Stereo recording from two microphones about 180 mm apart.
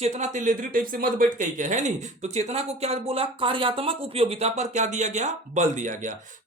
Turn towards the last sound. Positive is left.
turn(degrees=-45)  # may be behind; listen again after turning